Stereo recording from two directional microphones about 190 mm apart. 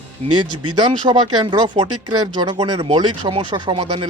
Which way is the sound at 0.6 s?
25° right (ahead or behind).